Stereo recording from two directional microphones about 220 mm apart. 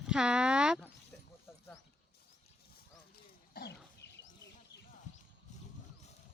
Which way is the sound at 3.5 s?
50° left (ahead or behind).